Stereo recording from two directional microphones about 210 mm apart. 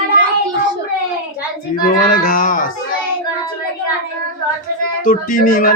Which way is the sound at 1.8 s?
40° left (ahead or behind).